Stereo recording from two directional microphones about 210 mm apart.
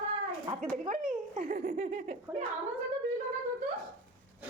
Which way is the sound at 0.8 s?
40° right (ahead or behind).